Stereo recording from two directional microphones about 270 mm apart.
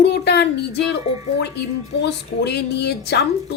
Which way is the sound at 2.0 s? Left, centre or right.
Left.